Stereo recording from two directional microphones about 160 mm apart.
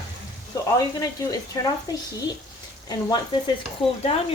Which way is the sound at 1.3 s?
20° left (ahead or behind).